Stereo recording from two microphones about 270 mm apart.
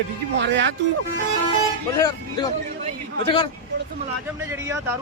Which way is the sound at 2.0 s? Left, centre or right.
Centre.